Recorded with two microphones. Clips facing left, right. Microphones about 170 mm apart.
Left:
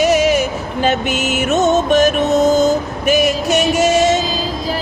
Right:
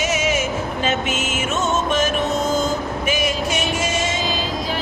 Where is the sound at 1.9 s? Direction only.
40° left (ahead or behind).